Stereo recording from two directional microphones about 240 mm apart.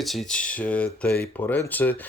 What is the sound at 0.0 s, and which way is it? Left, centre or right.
Speech, centre.